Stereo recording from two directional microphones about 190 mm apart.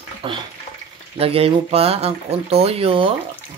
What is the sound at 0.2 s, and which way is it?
Speech, 30° right (ahead or behind).